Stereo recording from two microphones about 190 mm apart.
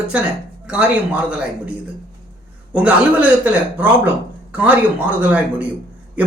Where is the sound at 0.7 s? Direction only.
5° right (ahead or behind).